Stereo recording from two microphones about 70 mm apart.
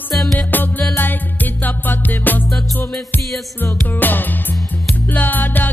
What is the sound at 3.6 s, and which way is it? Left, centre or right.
Music, left.